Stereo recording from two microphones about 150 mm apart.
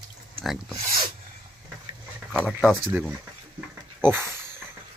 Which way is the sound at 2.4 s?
5° right (ahead or behind).